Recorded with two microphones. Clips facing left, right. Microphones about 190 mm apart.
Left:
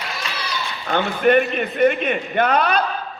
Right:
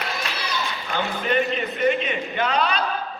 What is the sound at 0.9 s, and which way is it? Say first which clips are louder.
A man's voice: left 9 dB; 60° left (ahead or behind).